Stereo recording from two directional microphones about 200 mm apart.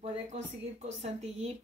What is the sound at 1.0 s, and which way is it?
Speech, 30° right (ahead or behind).